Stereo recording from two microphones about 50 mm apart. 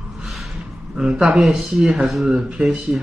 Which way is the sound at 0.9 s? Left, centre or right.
Centre.